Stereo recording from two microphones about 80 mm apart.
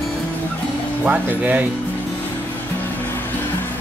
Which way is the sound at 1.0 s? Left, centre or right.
Centre.